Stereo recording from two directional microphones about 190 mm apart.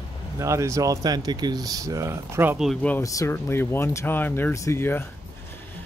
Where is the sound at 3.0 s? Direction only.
15° left (ahead or behind).